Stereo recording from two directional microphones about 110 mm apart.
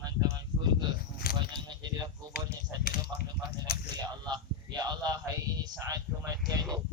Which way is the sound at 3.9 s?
35° right (ahead or behind).